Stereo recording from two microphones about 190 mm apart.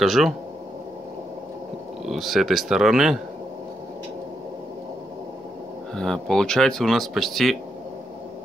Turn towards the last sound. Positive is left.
turn(degrees=0)  # may be behind; listen again after turning